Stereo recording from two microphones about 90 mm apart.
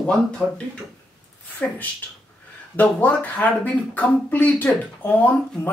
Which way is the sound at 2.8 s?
20° left (ahead or behind).